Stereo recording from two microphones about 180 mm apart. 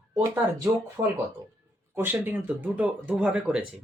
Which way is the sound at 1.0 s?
25° right (ahead or behind).